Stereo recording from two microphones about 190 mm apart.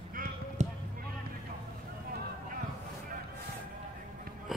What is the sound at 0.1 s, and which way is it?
Basketball bounce, 45° right (ahead or behind).